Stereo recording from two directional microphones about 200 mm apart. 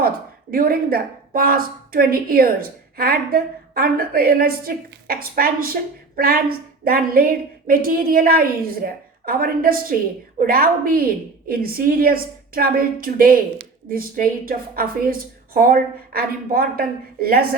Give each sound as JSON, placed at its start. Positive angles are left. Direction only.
{"t": 0.5, "sound": "a woman's voice", "side_deg": -45}